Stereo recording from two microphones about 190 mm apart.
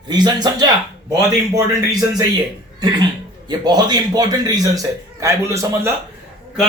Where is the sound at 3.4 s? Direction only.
20° right (ahead or behind).